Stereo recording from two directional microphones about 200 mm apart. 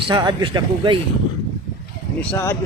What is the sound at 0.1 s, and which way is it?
Speech, 20° right (ahead or behind).